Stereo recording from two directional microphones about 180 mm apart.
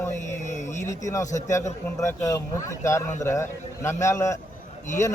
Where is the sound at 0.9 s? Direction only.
15° left (ahead or behind).